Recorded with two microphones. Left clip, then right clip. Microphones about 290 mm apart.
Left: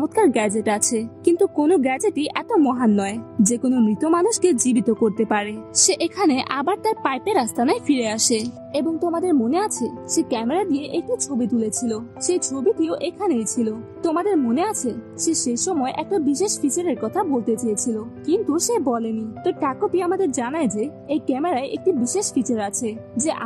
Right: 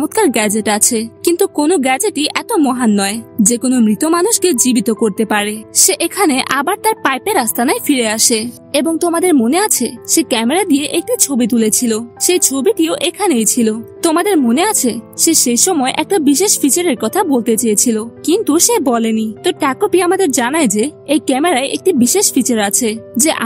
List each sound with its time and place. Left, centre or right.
0.0 s a woman's voice: right